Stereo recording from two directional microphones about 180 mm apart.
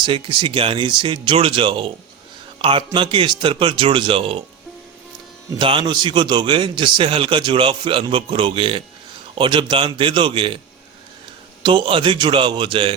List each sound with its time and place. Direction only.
0.0 s a man's voice: 30° right (ahead or behind)
5.5 s a man's voice: 30° right (ahead or behind)
11.6 s a man's voice: 25° right (ahead or behind)